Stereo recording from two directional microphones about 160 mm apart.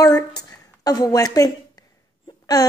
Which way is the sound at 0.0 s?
25° left (ahead or behind).